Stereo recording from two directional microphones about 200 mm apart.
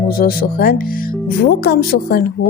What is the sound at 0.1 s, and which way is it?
Speech, 50° left (ahead or behind).